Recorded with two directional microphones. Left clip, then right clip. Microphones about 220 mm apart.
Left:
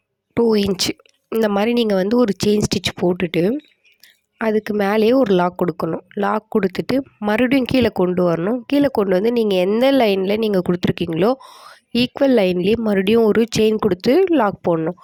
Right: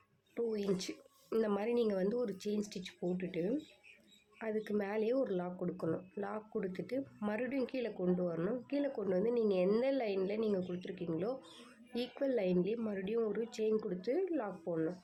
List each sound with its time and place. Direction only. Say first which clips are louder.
0.5 s speech: left 19 dB; 50° left (ahead or behind)